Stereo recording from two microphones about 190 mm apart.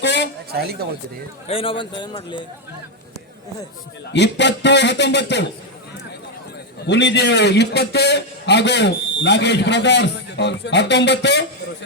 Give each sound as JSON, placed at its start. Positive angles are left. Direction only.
{"t": 0.0, "sound": "a sound", "side_deg": 65}
{"t": 0.5, "sound": "speech", "side_deg": -55}
{"t": 1.5, "sound": "a man's voice", "side_deg": 30}
{"t": 4.1, "sound": "a man's voice", "side_deg": 65}
{"t": 6.8, "sound": "a man's voice", "side_deg": 65}